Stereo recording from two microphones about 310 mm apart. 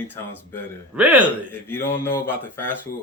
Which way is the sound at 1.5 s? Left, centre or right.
Centre.